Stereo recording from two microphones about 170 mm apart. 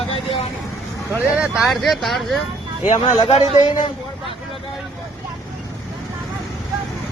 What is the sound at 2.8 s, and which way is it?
A man's voice, 45° left (ahead or behind).